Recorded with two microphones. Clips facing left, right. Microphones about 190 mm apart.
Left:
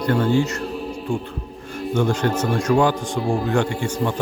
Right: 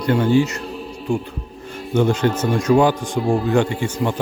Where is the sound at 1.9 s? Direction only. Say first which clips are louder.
Right 3 dB; 20° right (ahead or behind).